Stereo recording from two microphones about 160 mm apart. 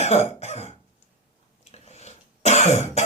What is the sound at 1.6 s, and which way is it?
Throat clearing, 45° left (ahead or behind).